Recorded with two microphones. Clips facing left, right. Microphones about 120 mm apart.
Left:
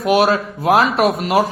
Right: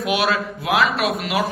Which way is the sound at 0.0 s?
45° left (ahead or behind).